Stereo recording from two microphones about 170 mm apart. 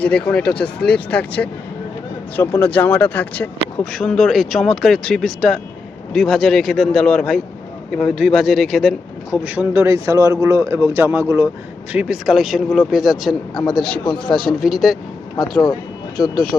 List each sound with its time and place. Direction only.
0.0 s speech: 5° left (ahead or behind)
15.4 s speech: 25° left (ahead or behind)